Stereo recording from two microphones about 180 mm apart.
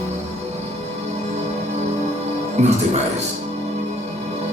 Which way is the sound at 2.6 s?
40° right (ahead or behind).